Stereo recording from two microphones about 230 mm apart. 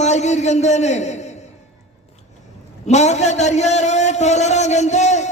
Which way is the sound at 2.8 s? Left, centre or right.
Left.